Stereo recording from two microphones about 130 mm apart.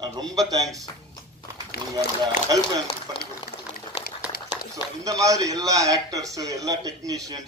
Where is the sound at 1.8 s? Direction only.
35° right (ahead or behind).